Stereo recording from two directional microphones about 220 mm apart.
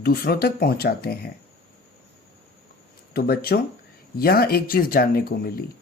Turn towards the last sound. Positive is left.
turn(degrees=45)  # may be behind; listen again after turning